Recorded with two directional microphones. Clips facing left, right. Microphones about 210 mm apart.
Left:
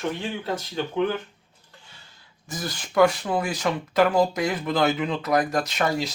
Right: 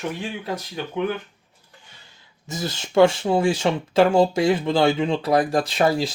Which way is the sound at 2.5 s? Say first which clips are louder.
Right 5 dB; 25° right (ahead or behind).